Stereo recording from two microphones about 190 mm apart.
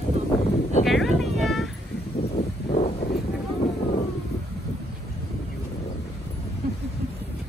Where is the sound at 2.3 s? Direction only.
35° left (ahead or behind).